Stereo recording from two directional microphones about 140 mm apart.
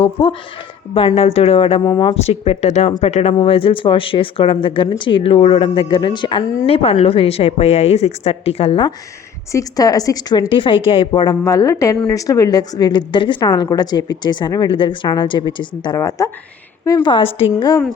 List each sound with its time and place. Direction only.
0.0 s speech: 45° left (ahead or behind)
1.9 s a woman's voice: 30° left (ahead or behind)
2.2 s speech: 45° left (ahead or behind)
9.5 s a woman's voice: 25° left (ahead or behind)
16.0 s a woman's voice: 20° left (ahead or behind)
17.1 s a woman's voice: 40° left (ahead or behind)